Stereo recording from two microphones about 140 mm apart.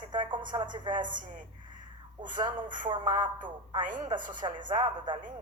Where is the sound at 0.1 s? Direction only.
35° right (ahead or behind).